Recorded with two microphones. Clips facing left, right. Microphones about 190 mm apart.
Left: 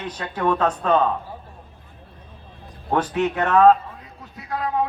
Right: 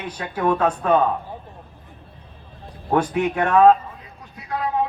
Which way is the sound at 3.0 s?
10° right (ahead or behind).